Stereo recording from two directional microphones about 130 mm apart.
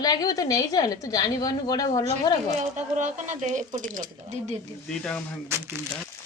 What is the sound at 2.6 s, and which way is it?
Speech, 70° right (ahead or behind).